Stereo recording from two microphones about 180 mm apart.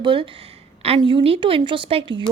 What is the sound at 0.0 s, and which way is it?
A woman's voice, 30° right (ahead or behind).